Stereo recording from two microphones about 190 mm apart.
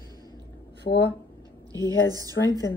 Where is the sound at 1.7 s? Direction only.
20° right (ahead or behind).